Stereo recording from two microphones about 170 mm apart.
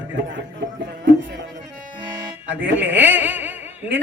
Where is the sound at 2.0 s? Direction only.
25° right (ahead or behind).